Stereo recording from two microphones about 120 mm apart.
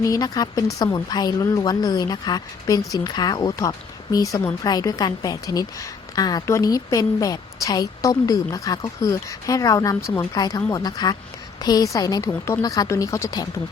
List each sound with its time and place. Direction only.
0.0 s a woman's voice: 30° left (ahead or behind)